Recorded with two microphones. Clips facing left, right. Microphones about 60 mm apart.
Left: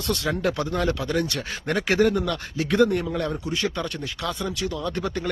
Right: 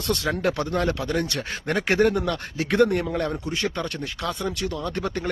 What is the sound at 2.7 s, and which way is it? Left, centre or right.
Speech, right.